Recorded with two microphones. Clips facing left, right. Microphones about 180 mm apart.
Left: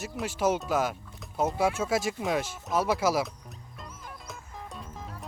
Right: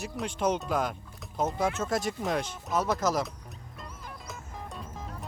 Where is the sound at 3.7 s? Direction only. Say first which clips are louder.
Even; centre (ahead or behind).